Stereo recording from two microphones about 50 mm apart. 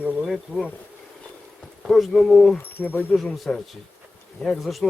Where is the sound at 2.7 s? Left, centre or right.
Left.